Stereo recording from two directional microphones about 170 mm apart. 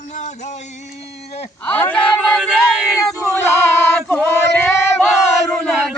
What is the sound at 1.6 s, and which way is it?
Speech, 10° left (ahead or behind).